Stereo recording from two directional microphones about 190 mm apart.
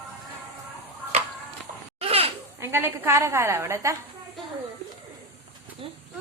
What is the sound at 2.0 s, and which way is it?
Laughter, 30° right (ahead or behind).